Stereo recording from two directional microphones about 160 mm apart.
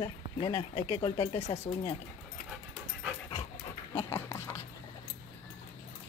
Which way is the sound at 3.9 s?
15° left (ahead or behind).